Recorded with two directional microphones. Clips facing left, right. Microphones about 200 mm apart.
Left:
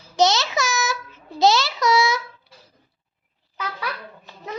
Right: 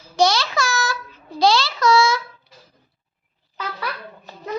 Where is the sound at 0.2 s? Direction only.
20° left (ahead or behind).